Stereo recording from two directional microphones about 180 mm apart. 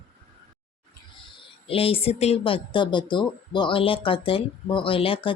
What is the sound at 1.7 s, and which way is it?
Speech, 30° left (ahead or behind).